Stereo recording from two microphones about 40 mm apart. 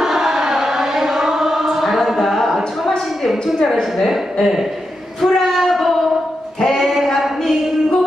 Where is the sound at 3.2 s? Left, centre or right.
Centre.